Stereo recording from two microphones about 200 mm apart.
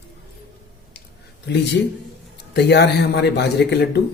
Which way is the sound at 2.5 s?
55° left (ahead or behind).